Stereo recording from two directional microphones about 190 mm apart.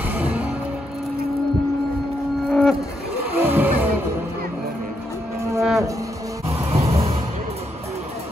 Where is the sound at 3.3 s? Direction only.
10° right (ahead or behind).